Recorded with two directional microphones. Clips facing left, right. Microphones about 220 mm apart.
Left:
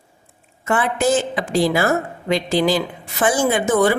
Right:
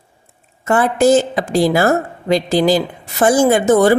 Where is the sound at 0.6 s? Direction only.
40° right (ahead or behind).